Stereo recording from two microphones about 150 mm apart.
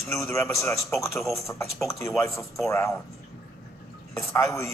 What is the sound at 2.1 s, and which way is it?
Speech, centre (ahead or behind).